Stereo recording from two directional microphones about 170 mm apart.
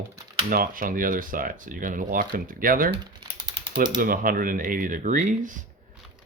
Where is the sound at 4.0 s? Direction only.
55° right (ahead or behind).